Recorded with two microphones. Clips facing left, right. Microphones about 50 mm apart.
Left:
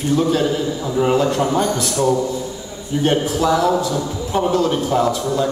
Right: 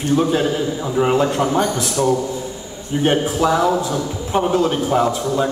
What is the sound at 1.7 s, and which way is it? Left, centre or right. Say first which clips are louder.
A man's voice: even; right.